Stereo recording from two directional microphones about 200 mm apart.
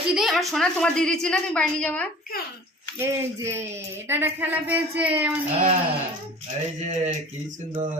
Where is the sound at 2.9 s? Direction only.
15° right (ahead or behind).